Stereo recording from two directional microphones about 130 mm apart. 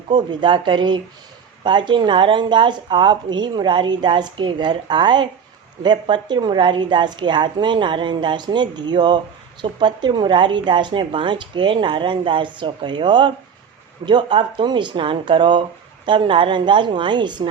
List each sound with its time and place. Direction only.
0.1 s speech: 35° right (ahead or behind)